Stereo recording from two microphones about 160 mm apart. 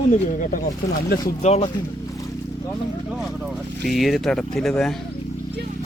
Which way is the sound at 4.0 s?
Centre (ahead or behind).